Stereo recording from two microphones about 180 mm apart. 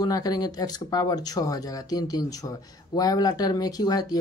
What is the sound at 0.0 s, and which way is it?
Speech, 20° left (ahead or behind).